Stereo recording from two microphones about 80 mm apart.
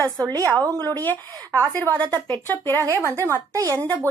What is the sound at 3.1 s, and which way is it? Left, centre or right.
Speech, right.